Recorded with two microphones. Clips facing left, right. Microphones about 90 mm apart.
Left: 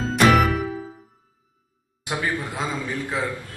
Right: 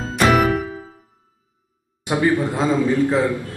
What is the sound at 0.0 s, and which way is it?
Music, centre (ahead or behind).